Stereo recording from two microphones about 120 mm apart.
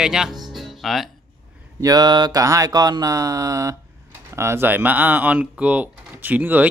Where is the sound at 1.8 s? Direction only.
35° right (ahead or behind).